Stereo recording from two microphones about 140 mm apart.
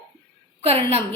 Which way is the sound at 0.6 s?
45° right (ahead or behind).